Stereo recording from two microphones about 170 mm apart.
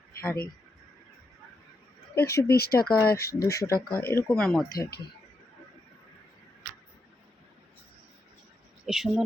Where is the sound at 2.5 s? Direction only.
65° left (ahead or behind).